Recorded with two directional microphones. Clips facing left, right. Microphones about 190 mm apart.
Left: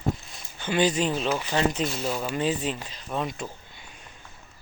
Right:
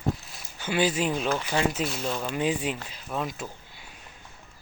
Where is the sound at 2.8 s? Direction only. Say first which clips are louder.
Left 1 dB; 10° right (ahead or behind).